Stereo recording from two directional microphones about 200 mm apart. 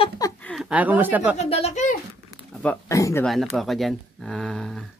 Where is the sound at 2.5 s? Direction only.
5° left (ahead or behind).